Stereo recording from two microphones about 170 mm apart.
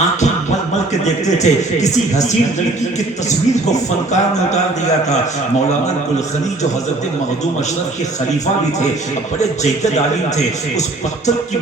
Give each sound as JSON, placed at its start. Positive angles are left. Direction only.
{"t": 1.0, "sound": "speech", "side_deg": 45}